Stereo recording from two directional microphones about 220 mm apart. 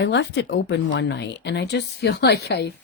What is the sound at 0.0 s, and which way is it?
Speech, 50° left (ahead or behind).